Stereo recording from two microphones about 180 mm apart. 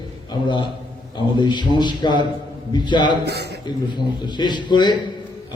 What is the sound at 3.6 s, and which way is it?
A man's voice, 25° left (ahead or behind).